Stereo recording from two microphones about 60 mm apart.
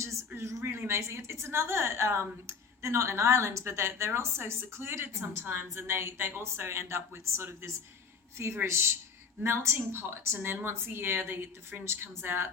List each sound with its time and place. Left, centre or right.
0.3 s a woman's voice: right